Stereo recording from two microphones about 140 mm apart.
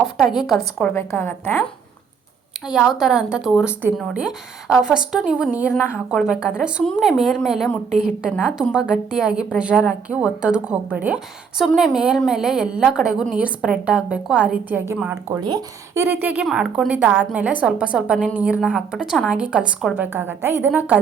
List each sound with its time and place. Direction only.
0.2 s a woman's voice: centre (ahead or behind)
0.9 s a woman's voice: 15° left (ahead or behind)
2.6 s a woman's voice: 5° right (ahead or behind)
15.4 s speech: 30° right (ahead or behind)
16.0 s a woman's voice: 15° right (ahead or behind)